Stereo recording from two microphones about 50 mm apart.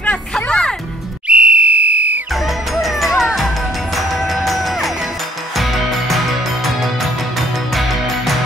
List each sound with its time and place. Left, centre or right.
0.0 s music: centre
1.2 s whistle: right
2.7 s music: centre